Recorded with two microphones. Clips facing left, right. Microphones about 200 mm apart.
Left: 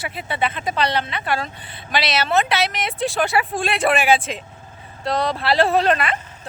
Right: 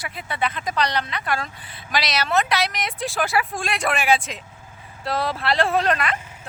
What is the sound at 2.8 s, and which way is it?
Speech, centre (ahead or behind).